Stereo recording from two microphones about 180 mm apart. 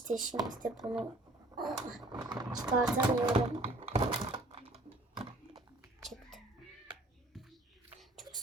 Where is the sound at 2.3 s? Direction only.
20° right (ahead or behind).